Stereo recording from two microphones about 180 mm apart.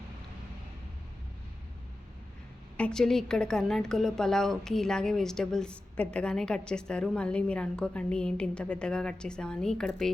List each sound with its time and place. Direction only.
2.7 s a woman's voice: 5° left (ahead or behind)